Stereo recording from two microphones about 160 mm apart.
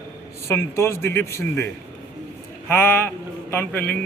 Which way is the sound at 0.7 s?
15° left (ahead or behind).